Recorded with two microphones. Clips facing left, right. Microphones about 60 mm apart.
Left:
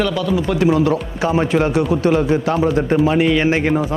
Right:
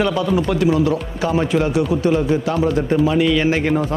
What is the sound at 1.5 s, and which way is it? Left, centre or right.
Speech, left.